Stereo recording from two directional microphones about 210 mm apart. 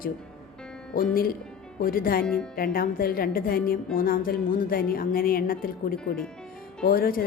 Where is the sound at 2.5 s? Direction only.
45° left (ahead or behind).